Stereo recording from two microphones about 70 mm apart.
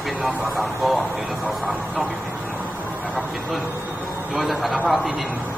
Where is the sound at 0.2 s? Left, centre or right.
Centre.